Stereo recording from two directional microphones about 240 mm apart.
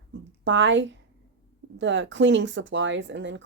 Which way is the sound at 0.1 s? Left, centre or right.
Right.